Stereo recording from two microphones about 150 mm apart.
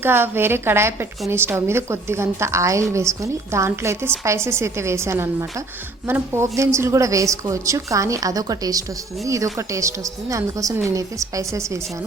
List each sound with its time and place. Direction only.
0.0 s a woman's voice: 15° right (ahead or behind)